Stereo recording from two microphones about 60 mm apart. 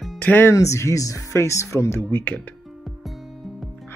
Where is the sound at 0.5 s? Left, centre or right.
Left.